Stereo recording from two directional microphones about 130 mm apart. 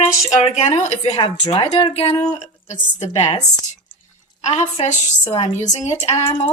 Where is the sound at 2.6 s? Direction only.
60° left (ahead or behind).